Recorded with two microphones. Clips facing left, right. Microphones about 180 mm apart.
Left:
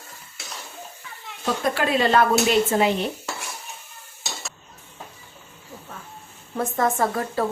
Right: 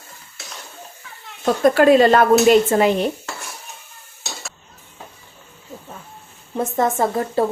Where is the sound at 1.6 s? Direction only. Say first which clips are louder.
Right 10 dB; 45° right (ahead or behind).